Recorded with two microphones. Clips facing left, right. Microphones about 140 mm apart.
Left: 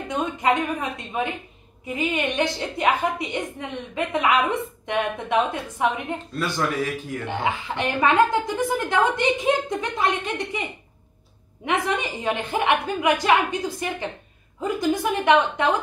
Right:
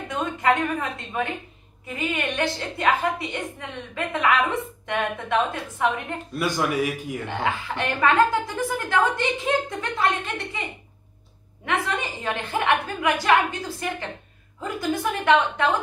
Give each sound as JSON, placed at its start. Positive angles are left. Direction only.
{"t": 0.1, "sound": "a woman's voice", "side_deg": 20}
{"t": 6.3, "sound": "speech", "side_deg": -10}
{"t": 7.2, "sound": "speech", "side_deg": 20}
{"t": 12.2, "sound": "speech", "side_deg": 15}